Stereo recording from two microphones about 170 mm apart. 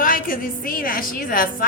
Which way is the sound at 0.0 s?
55° left (ahead or behind).